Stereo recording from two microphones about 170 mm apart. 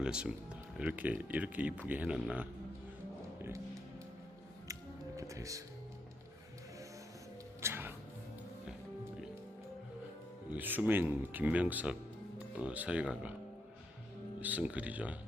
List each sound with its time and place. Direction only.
0.0 s speech: 5° right (ahead or behind)
4.7 s music: 20° right (ahead or behind)
7.6 s music: 15° right (ahead or behind)
10.5 s speech: 10° right (ahead or behind)
14.4 s speech: 10° right (ahead or behind)